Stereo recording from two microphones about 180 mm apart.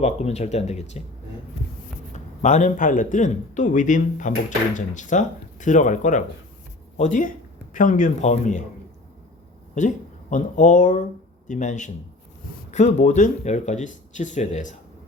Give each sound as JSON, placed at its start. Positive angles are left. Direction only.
{"t": 0.0, "sound": "speech", "side_deg": 35}
{"t": 2.1, "sound": "a man's voice", "side_deg": 40}
{"t": 9.7, "sound": "a man's voice", "side_deg": 45}